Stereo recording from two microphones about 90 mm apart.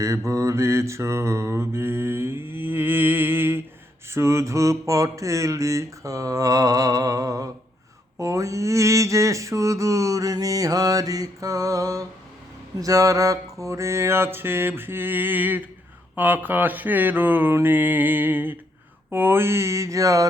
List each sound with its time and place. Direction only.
0.3 s mantra: 35° right (ahead or behind)